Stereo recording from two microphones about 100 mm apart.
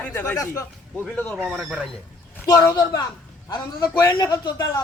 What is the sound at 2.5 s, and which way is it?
A woman's voice, 40° left (ahead or behind).